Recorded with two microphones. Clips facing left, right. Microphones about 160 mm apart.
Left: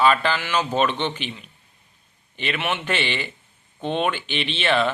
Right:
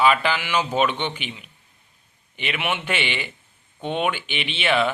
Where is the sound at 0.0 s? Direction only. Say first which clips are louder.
Even; 10° right (ahead or behind).